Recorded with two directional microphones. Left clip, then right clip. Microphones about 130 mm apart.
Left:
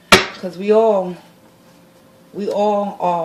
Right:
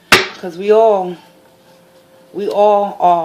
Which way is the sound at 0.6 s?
40° right (ahead or behind).